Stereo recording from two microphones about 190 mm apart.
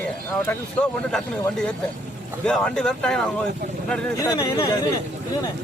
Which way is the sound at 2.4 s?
5° left (ahead or behind).